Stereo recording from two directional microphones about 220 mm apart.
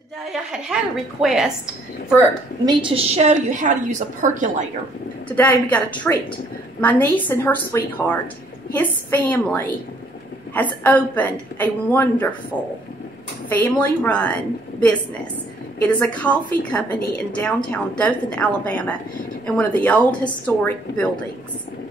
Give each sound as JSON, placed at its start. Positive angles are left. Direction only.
{"t": 0.3, "sound": "a woman's voice", "side_deg": -5}
{"t": 2.6, "sound": "a woman's voice", "side_deg": -20}
{"t": 5.3, "sound": "a woman's voice", "side_deg": 5}
{"t": 13.5, "sound": "a woman's voice", "side_deg": 5}
{"t": 17.6, "sound": "a woman's voice", "side_deg": 5}